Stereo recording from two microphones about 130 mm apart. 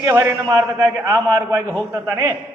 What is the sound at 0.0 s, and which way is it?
A man's voice, 25° right (ahead or behind).